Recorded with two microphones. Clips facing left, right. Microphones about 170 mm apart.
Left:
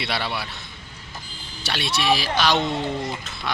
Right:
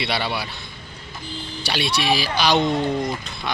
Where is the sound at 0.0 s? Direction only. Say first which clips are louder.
Right 3 dB; centre (ahead or behind).